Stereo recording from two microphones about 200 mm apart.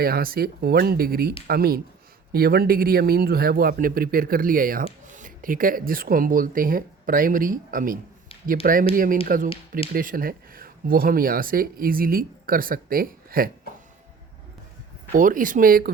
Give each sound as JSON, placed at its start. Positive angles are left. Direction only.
{"t": 0.0, "sound": "speech", "side_deg": -50}
{"t": 15.1, "sound": "speech", "side_deg": -40}